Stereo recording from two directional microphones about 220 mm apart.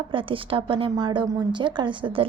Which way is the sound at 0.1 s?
25° right (ahead or behind).